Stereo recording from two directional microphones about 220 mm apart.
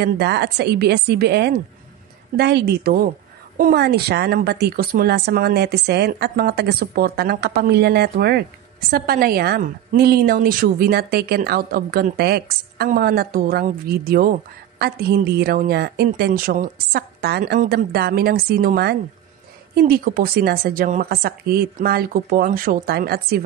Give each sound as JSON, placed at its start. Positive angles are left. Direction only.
{"t": 0.0, "sound": "a woman's voice", "side_deg": -50}